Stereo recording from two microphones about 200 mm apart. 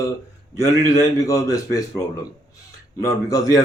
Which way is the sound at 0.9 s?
15° left (ahead or behind).